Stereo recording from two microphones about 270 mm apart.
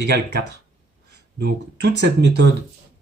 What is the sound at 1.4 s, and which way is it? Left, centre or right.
Speech, right.